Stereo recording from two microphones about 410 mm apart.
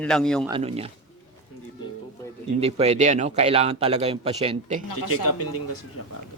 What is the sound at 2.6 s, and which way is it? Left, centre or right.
Speech, centre.